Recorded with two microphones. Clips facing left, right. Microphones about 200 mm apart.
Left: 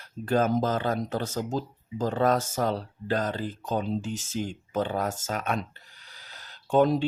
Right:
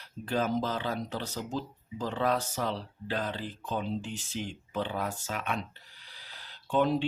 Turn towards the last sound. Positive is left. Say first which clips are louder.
# left 5 dB
turn(degrees=40)  # may be behind; listen again after turning